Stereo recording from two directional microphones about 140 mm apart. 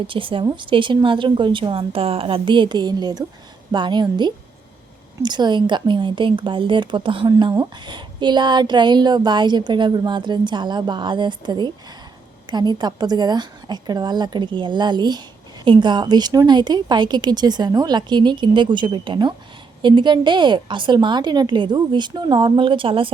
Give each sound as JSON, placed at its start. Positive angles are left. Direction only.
{"t": 0.1, "sound": "a woman's voice", "side_deg": -40}